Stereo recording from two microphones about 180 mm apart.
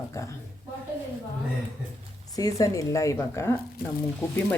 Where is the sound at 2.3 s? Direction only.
20° left (ahead or behind).